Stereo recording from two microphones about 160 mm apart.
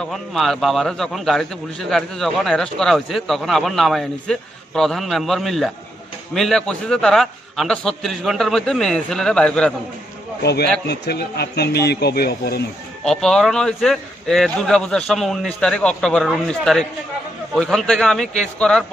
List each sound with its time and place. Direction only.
0.0 s a man's voice: centre (ahead or behind)
10.4 s speech: 90° left
13.0 s a man's voice: 5° left (ahead or behind)